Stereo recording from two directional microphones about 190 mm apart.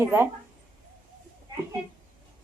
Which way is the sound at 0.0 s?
15° right (ahead or behind).